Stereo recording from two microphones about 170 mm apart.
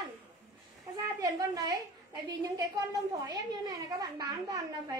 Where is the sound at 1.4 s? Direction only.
20° right (ahead or behind).